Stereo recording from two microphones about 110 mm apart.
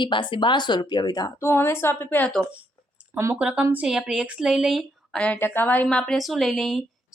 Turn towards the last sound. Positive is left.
turn(degrees=5)  # may be behind; listen again after turning